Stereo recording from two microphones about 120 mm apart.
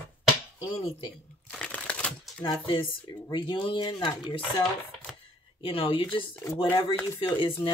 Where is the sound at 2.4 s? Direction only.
45° left (ahead or behind).